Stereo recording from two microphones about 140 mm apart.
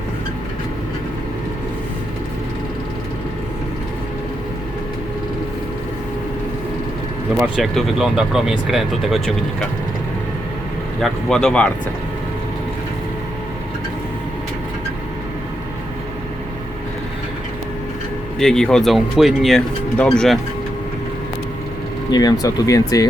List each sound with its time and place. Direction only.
7.3 s speech: 5° right (ahead or behind)
11.0 s speech: 5° left (ahead or behind)
18.3 s speech: 5° left (ahead or behind)
22.1 s speech: 30° left (ahead or behind)